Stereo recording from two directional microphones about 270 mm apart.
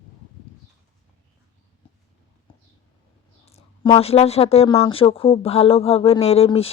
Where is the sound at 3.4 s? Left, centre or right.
Left.